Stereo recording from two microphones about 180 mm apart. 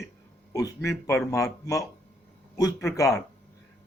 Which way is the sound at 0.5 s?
15° left (ahead or behind).